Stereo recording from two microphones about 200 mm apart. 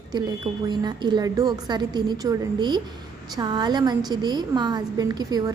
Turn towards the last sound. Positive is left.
turn(degrees=-20)  # may be behind; listen again after turning